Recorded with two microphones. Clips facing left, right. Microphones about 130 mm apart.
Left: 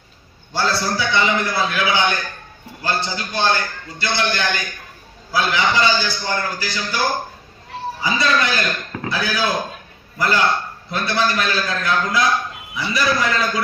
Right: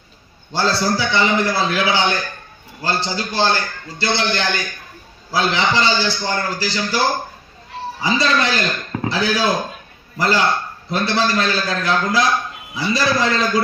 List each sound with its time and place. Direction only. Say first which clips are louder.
0.5 s a man's voice: right 2 dB; 25° right (ahead or behind)